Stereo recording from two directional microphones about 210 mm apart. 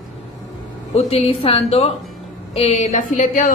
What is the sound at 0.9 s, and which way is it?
A woman's voice, 30° left (ahead or behind).